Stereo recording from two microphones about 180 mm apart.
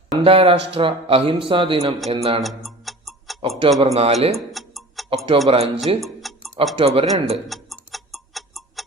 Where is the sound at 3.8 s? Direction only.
35° right (ahead or behind).